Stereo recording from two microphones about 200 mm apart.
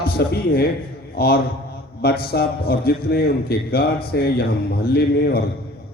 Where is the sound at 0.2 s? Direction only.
50° left (ahead or behind).